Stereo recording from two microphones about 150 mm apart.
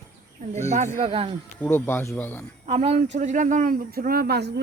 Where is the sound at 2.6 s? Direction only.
45° right (ahead or behind); by 4.4 s 90° right.